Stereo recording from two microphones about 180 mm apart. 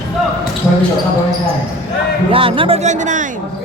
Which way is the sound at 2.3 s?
30° right (ahead or behind).